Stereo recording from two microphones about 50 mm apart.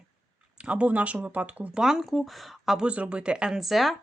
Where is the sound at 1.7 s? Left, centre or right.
Centre.